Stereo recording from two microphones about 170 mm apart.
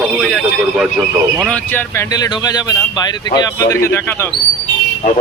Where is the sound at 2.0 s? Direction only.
20° left (ahead or behind).